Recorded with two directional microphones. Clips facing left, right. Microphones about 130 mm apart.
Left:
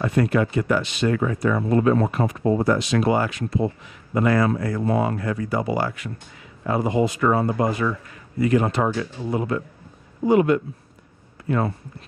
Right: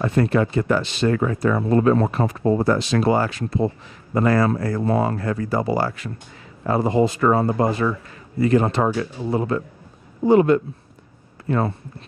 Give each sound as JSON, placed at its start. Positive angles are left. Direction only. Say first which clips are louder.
{"t": 0.1, "sound": "speech", "louder": "right 1 dB", "side_deg": -30}